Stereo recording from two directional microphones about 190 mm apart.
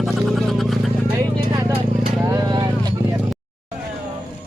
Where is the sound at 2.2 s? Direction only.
20° right (ahead or behind).